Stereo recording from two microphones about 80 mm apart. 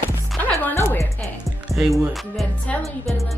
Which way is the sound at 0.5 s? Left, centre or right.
Left.